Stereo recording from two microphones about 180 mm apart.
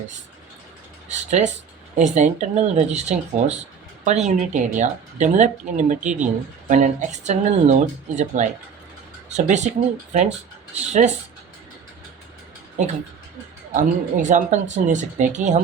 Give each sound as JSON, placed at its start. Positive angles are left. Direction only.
{"t": 1.3, "sound": "speech", "side_deg": -40}
{"t": 10.8, "sound": "speech", "side_deg": -40}
{"t": 12.8, "sound": "speech", "side_deg": -40}